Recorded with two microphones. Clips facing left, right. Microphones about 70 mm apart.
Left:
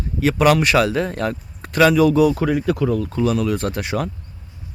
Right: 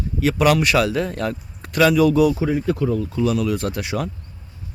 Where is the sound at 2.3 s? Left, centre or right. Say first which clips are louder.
Left 1 dB; left.